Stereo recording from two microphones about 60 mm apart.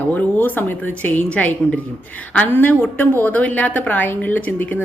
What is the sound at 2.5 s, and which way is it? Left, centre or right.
Speech, left.